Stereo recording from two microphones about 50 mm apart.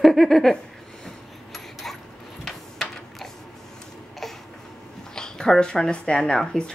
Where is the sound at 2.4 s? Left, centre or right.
Centre.